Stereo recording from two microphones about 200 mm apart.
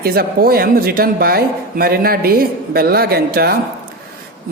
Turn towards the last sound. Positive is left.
turn(degrees=-50)  # may be behind; listen again after turning